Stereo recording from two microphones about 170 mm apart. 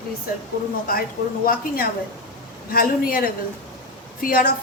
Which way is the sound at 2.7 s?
60° left (ahead or behind).